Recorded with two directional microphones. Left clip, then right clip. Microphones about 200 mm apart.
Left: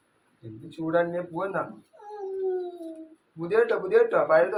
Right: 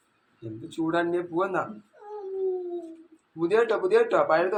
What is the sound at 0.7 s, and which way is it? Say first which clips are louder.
Speech: left 1 dB; 25° right (ahead or behind).